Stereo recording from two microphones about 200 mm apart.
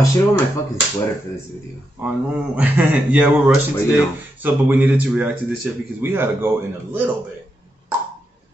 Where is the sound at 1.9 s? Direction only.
5° right (ahead or behind).